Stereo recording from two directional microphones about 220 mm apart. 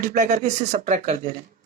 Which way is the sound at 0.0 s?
35° right (ahead or behind).